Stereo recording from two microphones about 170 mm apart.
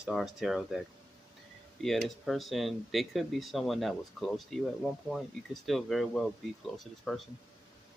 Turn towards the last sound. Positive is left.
turn(degrees=0)  # may be behind; listen again after turning